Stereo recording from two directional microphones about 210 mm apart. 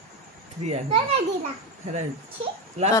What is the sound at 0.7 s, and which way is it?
Speech, 25° right (ahead or behind).